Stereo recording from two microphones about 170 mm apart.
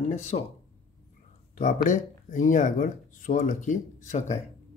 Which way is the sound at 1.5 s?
50° left (ahead or behind).